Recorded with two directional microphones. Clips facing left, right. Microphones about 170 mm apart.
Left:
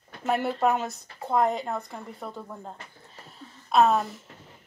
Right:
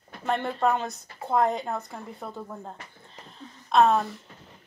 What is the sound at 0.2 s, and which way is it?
Speech, 5° left (ahead or behind).